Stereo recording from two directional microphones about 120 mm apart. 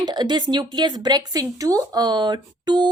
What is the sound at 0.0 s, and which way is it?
A woman's voice, 35° right (ahead or behind).